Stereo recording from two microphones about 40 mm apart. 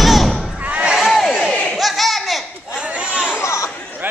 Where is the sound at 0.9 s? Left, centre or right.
Centre.